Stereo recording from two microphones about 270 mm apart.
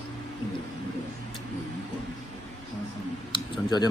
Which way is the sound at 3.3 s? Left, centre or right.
Centre.